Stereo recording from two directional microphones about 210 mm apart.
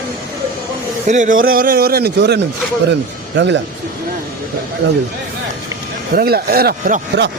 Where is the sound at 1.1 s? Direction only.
35° right (ahead or behind); by 3.5 s 55° right (ahead or behind).